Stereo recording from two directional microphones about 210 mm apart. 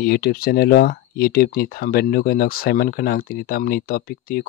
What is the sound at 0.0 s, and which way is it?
Speech, 50° left (ahead or behind).